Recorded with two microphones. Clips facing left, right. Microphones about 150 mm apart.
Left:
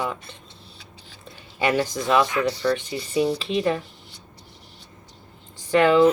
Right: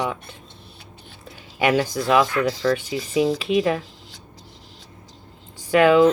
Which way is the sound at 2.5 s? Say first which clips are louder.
Right 2 dB; 90° right.